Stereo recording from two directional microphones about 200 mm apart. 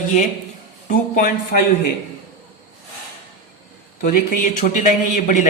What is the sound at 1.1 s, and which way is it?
Speech, 45° left (ahead or behind).